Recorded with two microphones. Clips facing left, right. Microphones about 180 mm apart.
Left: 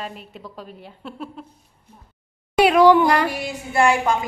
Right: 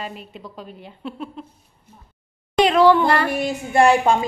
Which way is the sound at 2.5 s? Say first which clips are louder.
Left 1 dB; 10° left (ahead or behind).